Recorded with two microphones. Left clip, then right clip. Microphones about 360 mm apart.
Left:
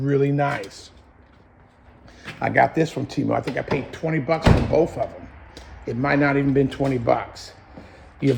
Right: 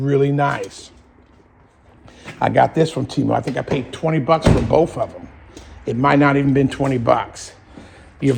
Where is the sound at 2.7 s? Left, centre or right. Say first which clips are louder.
Right 5 dB; centre.